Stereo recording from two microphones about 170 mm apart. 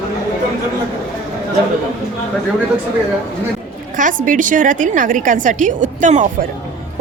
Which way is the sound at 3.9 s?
50° right (ahead or behind).